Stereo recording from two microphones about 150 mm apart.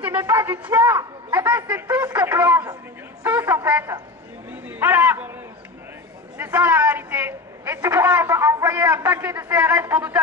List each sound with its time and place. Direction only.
0.2 s speech: 15° right (ahead or behind)
3.3 s a sound: 15° right (ahead or behind)
6.3 s a man's voice: 15° right (ahead or behind)